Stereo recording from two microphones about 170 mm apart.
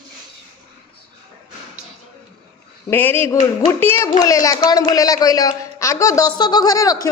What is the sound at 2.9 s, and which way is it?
A woman's voice, 10° left (ahead or behind).